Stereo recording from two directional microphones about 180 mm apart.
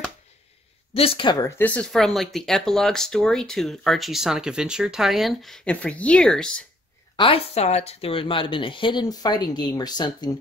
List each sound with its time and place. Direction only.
0.9 s speech: 30° left (ahead or behind)
1.6 s speech: 5° left (ahead or behind)
7.2 s speech: 30° left (ahead or behind)